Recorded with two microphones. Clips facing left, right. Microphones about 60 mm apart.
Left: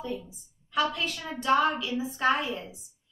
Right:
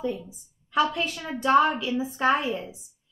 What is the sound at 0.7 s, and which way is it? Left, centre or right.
A woman's voice, right.